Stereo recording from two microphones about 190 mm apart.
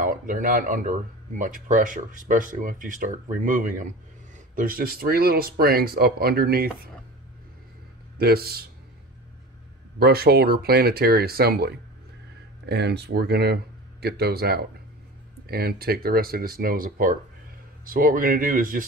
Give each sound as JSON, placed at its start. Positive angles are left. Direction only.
{"t": 0.0, "sound": "speech", "side_deg": -45}
{"t": 8.2, "sound": "speech", "side_deg": -55}
{"t": 9.9, "sound": "speech", "side_deg": -55}